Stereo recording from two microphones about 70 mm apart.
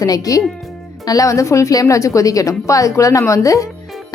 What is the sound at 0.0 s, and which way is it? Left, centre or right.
A woman's voice, left.